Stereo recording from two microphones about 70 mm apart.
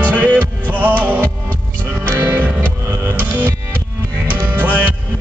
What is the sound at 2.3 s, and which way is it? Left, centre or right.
Music, right.